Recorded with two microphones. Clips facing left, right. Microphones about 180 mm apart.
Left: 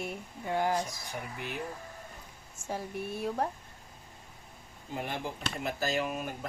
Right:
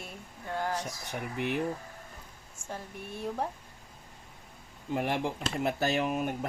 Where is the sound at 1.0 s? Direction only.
65° right (ahead or behind).